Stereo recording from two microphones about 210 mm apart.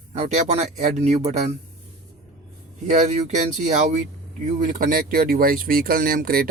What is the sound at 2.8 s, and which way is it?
Speech, 35° right (ahead or behind).